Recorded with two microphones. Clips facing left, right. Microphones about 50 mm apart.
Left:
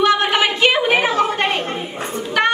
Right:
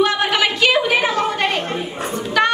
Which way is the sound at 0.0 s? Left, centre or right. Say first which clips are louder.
Left 2 dB; left.